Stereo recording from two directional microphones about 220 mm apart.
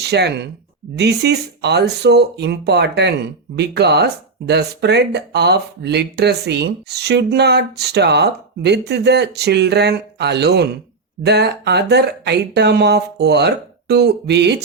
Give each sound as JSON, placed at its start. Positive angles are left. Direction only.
{"t": 0.0, "sound": "speech", "side_deg": -50}